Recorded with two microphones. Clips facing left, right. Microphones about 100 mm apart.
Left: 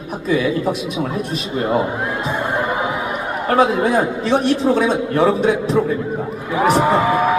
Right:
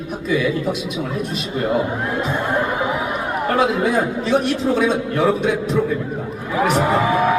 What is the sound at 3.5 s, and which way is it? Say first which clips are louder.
A man's voice: left 3 dB; 35° left (ahead or behind).